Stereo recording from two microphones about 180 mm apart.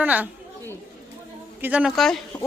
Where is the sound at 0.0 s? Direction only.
10° right (ahead or behind).